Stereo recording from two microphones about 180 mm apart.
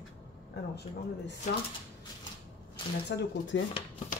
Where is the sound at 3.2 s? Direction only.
90° left.